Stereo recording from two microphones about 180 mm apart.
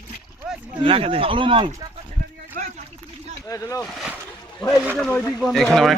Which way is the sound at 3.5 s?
20° left (ahead or behind).